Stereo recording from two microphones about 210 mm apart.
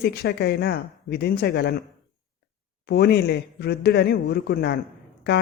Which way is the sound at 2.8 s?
50° left (ahead or behind).